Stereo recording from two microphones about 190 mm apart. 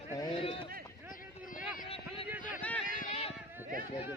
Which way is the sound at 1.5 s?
45° left (ahead or behind).